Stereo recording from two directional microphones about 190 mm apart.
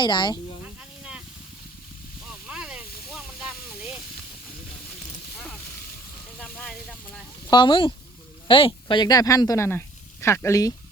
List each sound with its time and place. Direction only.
0.0 s speech: 25° left (ahead or behind)
0.6 s snake: 5° right (ahead or behind)
2.2 s a sound: 5° right (ahead or behind)
3.1 s hiss: centre (ahead or behind)
6.4 s speech: 5° left (ahead or behind)
7.4 s speech: 25° left (ahead or behind)